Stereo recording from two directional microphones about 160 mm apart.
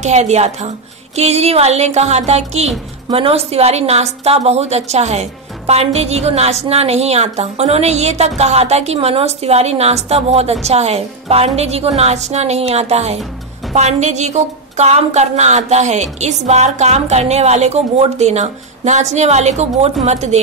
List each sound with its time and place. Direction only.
0.0 s a woman's voice: 45° right (ahead or behind)